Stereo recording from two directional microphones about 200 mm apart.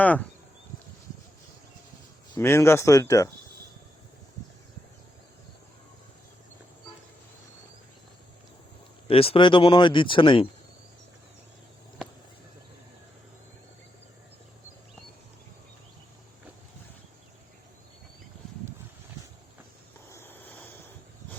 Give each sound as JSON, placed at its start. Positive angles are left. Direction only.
{"t": 0.0, "sound": "speech", "side_deg": 10}
{"t": 2.3, "sound": "speech", "side_deg": 10}
{"t": 9.0, "sound": "speech", "side_deg": 30}
{"t": 20.1, "sound": "a sound", "side_deg": 10}